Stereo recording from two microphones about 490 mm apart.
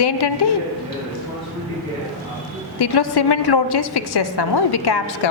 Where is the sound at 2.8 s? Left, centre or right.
Left.